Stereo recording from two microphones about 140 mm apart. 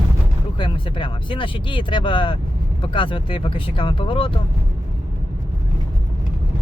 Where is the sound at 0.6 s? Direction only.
35° left (ahead or behind).